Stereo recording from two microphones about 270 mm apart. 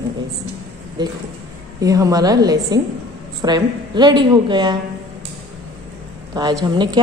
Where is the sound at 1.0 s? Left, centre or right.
Centre.